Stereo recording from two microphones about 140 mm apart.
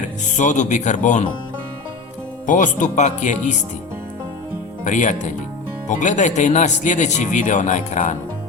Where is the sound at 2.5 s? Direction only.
65° left (ahead or behind).